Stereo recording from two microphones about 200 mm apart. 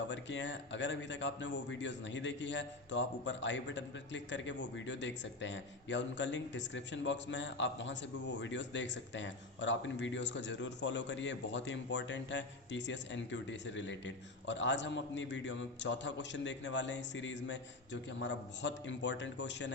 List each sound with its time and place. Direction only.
0.1 s a man's voice: 65° left (ahead or behind)